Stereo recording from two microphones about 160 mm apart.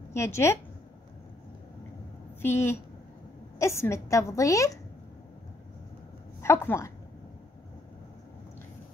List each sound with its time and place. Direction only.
0.1 s speech: 15° left (ahead or behind)
2.4 s a woman's voice: 15° left (ahead or behind)
6.4 s speech: 15° left (ahead or behind)